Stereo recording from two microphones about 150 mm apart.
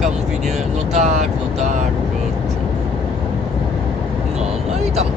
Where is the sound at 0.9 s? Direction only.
50° right (ahead or behind).